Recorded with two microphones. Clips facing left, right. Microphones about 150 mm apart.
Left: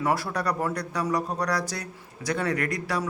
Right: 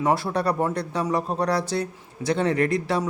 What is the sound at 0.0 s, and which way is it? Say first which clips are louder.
A man's voice: right 4 dB; 25° right (ahead or behind).